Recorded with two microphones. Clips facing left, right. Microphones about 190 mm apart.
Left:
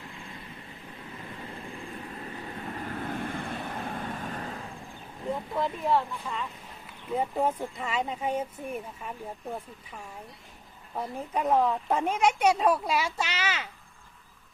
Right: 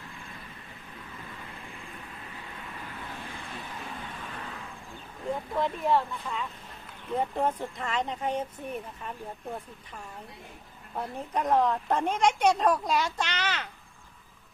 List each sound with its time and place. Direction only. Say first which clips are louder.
2.5 s vehicle: left 8 dB; 45° left (ahead or behind)
5.5 s speech: right 1 dB; centre (ahead or behind)